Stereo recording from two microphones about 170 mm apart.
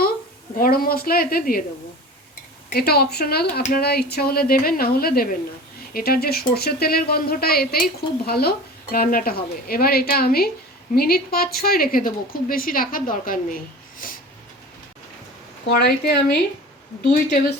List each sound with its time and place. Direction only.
0.5 s a woman's voice: 55° left (ahead or behind)
2.7 s a woman's voice: 65° left (ahead or behind)
15.6 s a woman's voice: 70° left (ahead or behind)